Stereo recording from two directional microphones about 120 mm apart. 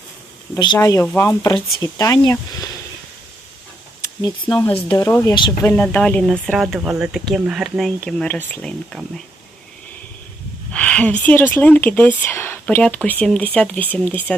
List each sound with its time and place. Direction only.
0.8 s speech: 25° left (ahead or behind)
4.2 s speech: 35° left (ahead or behind)
5.5 s speech: 15° left (ahead or behind)
6.7 s speech: 10° right (ahead or behind)
8.0 s speech: 10° left (ahead or behind)
8.9 s speech: 5° left (ahead or behind)
10.7 s speech: 10° left (ahead or behind)